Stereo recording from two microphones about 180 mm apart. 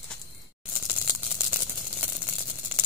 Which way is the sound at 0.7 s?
10° right (ahead or behind).